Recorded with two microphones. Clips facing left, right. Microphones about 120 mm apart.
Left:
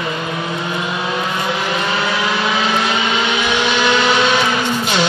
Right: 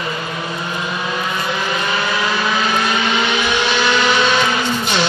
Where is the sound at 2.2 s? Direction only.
20° left (ahead or behind).